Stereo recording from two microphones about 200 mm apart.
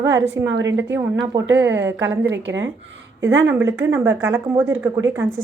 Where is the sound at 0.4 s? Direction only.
70° right (ahead or behind).